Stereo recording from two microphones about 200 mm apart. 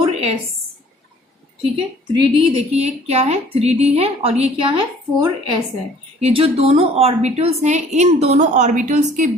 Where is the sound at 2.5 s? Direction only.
30° right (ahead or behind).